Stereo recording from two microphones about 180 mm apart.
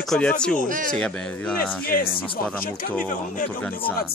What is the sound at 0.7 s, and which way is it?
Speech, 50° right (ahead or behind).